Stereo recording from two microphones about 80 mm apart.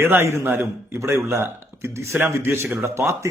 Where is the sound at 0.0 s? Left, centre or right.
Right.